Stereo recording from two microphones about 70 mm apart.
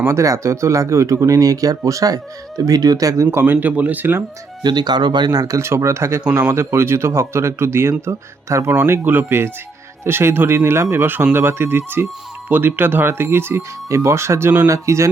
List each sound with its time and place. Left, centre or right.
0.1 s speech: right
3.4 s speech: right
4.6 s speech: right
5.5 s speech: right
8.7 s speech: right